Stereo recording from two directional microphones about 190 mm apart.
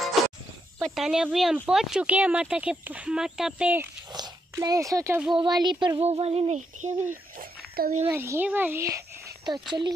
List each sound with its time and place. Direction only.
0.2 s a sound: centre (ahead or behind)
0.8 s speech: centre (ahead or behind)
4.1 s speech: 20° right (ahead or behind)
5.3 s child singing: 25° right (ahead or behind)
7.3 s a sound: 50° right (ahead or behind)
8.1 s a child's voice: 10° right (ahead or behind)
9.5 s child singing: 20° right (ahead or behind)